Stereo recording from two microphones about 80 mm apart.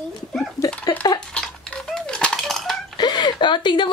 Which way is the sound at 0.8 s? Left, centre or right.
Left.